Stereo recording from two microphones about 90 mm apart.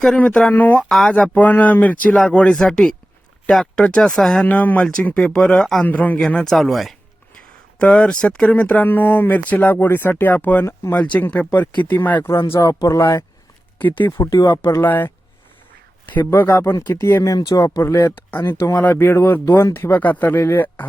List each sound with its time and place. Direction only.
0.2 s speech: 15° left (ahead or behind)
0.9 s speech: 5° left (ahead or behind)
1.1 s speech: 15° left (ahead or behind)
4.4 s speech: 20° left (ahead or behind)
5.8 s speech: 20° left (ahead or behind)
6.1 s speech: 5° left (ahead or behind)
7.3 s speech: 10° left (ahead or behind); by 10.9 s 25° left (ahead or behind)
10.9 s speech: 15° left (ahead or behind)
12.5 s speech: 40° left (ahead or behind)
14.8 s a man's voice: 20° left (ahead or behind)
16.3 s speech: 30° left (ahead or behind)
17.3 s speech: 45° left (ahead or behind)
17.8 s speech: 30° left (ahead or behind)